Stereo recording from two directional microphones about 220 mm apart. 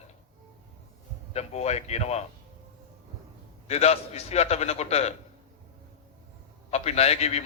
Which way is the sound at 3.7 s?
30° left (ahead or behind).